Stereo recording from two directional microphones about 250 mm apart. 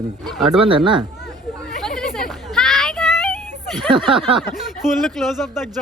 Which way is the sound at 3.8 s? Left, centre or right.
Centre.